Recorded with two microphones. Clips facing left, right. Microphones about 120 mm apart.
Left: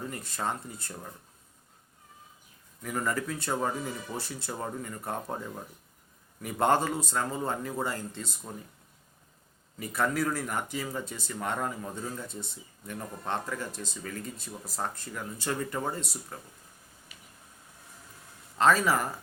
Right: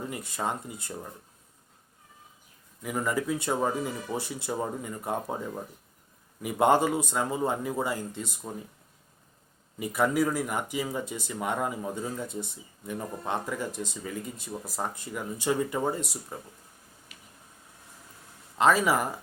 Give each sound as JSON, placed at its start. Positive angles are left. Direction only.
{"t": 0.1, "sound": "speech", "side_deg": -15}
{"t": 2.8, "sound": "speech", "side_deg": -10}
{"t": 9.7, "sound": "speech", "side_deg": -10}
{"t": 18.5, "sound": "speech", "side_deg": -10}